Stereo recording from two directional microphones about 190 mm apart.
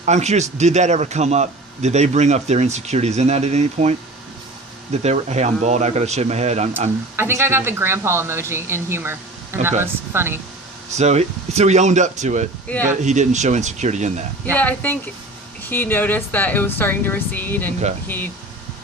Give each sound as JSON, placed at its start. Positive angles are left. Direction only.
{"t": 0.0, "sound": "a man's voice", "side_deg": -35}
{"t": 5.0, "sound": "a man's voice", "side_deg": -35}
{"t": 7.2, "sound": "speech", "side_deg": -15}
{"t": 10.9, "sound": "a man's voice", "side_deg": -35}
{"t": 14.5, "sound": "speech", "side_deg": 10}